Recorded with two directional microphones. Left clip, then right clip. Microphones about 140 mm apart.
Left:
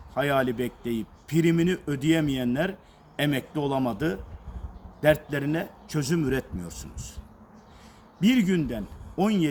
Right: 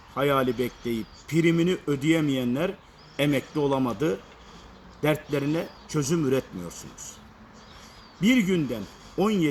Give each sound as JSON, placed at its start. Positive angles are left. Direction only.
{"t": 0.1, "sound": "speech", "side_deg": 35}
{"t": 8.2, "sound": "speech", "side_deg": 30}